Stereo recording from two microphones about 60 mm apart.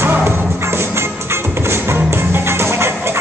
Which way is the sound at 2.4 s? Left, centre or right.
Right.